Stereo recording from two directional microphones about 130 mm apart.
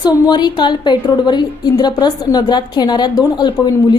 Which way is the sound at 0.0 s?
35° left (ahead or behind).